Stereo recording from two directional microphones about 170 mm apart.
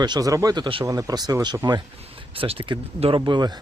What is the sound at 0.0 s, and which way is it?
Speech, 25° right (ahead or behind).